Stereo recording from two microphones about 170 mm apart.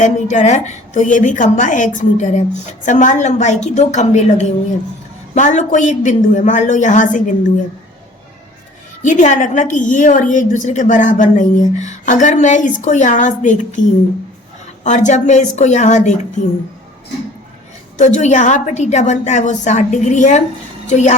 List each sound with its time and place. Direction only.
0.0 s a woman's voice: 45° left (ahead or behind)
9.0 s a woman's voice: 45° left (ahead or behind)
14.8 s a woman's voice: 45° left (ahead or behind)
17.9 s a woman's voice: 45° left (ahead or behind)